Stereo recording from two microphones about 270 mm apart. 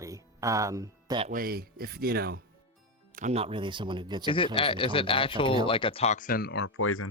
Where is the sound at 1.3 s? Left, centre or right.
Right.